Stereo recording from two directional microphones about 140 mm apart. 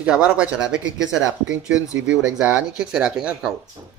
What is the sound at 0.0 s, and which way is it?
Speech, 10° right (ahead or behind).